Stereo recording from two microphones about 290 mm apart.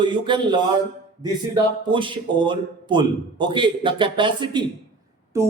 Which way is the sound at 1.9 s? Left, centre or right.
Centre.